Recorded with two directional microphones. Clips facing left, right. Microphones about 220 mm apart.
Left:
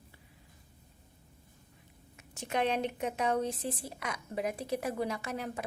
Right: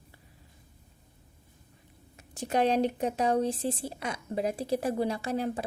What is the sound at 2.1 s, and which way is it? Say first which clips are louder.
A woman's voice: right 5 dB; 35° right (ahead or behind).